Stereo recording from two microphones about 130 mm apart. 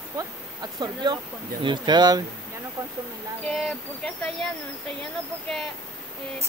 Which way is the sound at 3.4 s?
5° left (ahead or behind).